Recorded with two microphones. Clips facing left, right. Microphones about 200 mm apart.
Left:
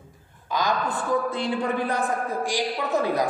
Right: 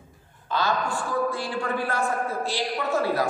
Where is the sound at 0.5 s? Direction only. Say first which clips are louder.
Even; 15° left (ahead or behind).